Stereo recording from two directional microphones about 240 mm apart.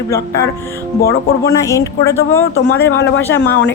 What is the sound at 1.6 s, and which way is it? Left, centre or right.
Speech, centre.